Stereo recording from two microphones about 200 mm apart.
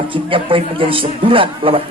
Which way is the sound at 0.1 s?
25° right (ahead or behind).